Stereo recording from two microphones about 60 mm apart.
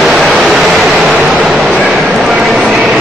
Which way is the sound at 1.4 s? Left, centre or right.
Centre.